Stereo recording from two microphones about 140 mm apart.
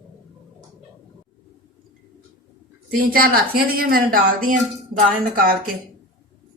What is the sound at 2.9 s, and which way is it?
A woman's voice, 90° right.